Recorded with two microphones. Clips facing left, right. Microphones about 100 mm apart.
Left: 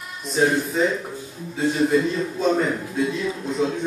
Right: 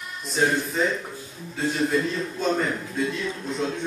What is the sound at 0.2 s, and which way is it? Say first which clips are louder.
A man's voice: left 3 dB; centre (ahead or behind).